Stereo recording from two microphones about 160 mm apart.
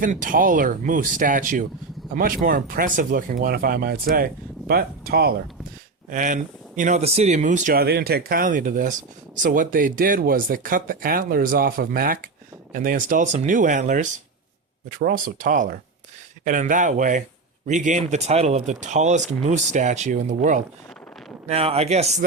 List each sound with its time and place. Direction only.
0.0 s speech: 55° right (ahead or behind); by 5.3 s 70° right (ahead or behind)
6.1 s speech: 55° right (ahead or behind)
7.8 s speech: 80° right; by 20.6 s 50° right (ahead or behind)
21.4 s speech: 40° right (ahead or behind)